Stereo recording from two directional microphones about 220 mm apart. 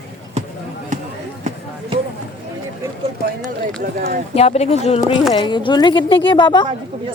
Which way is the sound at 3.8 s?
45° right (ahead or behind).